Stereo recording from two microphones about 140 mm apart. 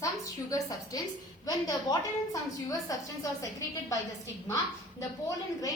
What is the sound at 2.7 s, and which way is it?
A woman's voice, 25° left (ahead or behind).